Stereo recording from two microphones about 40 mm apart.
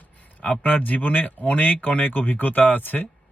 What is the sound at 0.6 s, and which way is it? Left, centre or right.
Speech, left.